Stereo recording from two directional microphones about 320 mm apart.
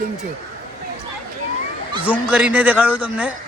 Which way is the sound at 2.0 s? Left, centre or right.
Centre.